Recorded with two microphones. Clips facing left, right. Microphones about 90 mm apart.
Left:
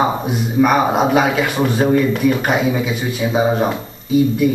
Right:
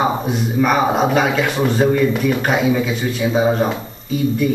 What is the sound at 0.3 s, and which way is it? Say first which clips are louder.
A man's voice: left 2 dB; 5° left (ahead or behind).